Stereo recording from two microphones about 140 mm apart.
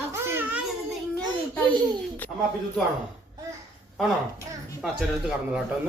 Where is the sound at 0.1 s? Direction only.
15° right (ahead or behind).